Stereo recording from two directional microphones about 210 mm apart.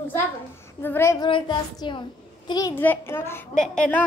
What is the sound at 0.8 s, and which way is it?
A child's voice, 10° left (ahead or behind).